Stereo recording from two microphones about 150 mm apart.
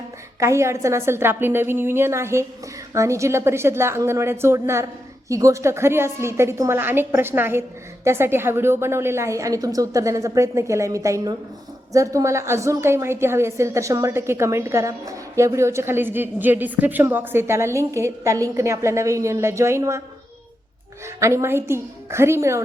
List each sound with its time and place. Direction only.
0.3 s a woman's voice: 20° right (ahead or behind)
21.2 s a woman's voice: 20° right (ahead or behind)